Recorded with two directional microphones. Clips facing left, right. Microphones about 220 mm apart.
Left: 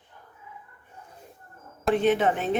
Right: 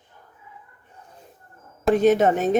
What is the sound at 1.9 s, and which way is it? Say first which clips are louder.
Speech: right 5 dB; 40° right (ahead or behind).